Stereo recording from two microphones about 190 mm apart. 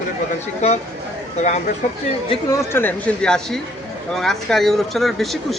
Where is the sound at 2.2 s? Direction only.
25° left (ahead or behind).